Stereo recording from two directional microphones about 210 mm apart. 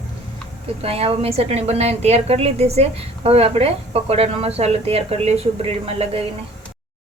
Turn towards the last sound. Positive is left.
turn(degrees=-30)  # may be behind; listen again after turning